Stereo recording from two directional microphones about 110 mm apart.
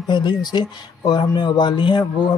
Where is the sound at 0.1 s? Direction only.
40° left (ahead or behind).